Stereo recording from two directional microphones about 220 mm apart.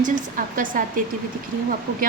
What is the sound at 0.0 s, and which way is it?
Speech, 40° right (ahead or behind).